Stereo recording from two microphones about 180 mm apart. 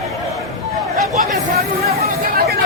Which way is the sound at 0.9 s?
55° right (ahead or behind).